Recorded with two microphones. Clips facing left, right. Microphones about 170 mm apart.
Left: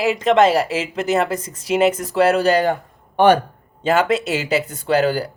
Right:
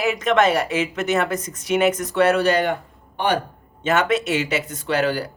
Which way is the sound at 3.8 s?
30° left (ahead or behind).